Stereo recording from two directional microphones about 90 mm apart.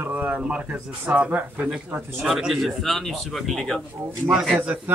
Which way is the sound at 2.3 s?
5° right (ahead or behind).